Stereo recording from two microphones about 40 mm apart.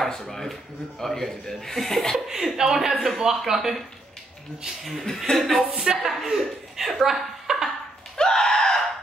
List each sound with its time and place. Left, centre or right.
0.0 s speech: centre
2.1 s speech: centre
5.0 s speech: centre
5.7 s a woman's voice: centre
8.2 s screaming: centre